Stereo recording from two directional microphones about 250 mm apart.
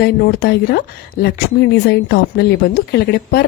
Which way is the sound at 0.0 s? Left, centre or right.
Left.